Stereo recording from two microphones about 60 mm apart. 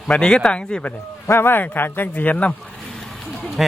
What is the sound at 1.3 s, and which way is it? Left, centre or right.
A man's voice, left.